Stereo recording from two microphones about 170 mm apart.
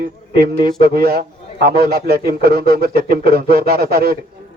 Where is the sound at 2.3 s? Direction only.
65° right (ahead or behind).